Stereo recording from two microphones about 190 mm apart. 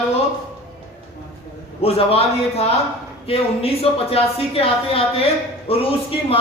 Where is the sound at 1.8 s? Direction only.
30° left (ahead or behind).